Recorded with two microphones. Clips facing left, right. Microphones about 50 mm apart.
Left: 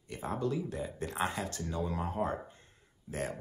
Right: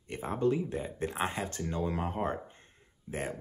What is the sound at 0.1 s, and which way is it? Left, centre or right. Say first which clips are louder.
Speech: right 4 dB; right.